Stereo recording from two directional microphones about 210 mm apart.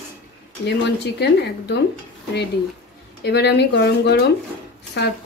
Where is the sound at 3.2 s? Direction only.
55° left (ahead or behind).